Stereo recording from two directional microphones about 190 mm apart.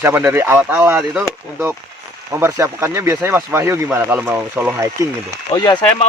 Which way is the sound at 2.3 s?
15° right (ahead or behind).